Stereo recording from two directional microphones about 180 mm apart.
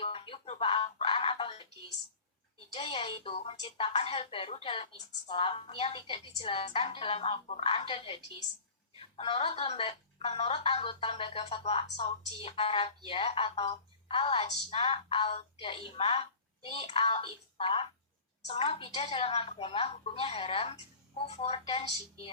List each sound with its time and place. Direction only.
0.0 s music: 30° left (ahead or behind)
2.7 s a woman's voice: 35° left (ahead or behind)